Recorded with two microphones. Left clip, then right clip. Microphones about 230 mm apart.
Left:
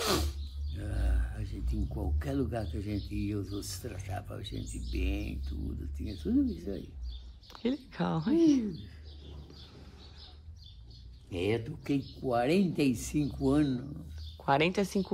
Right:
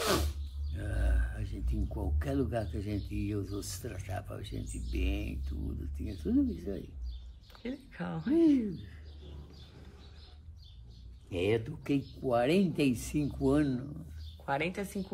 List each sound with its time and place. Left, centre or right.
0.0 s speech: centre
7.9 s speech: centre
11.2 s speech: centre
14.4 s speech: left